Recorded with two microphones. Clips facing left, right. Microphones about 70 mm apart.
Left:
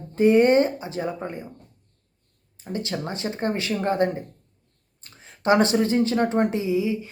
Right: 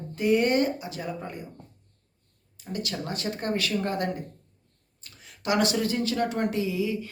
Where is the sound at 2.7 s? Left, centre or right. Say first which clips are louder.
Left 3 dB; left.